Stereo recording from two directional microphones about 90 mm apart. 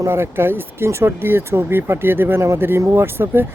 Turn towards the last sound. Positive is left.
turn(degrees=-25)  # may be behind; listen again after turning